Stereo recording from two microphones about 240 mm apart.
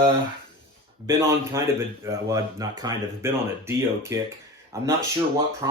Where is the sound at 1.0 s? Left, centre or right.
Centre.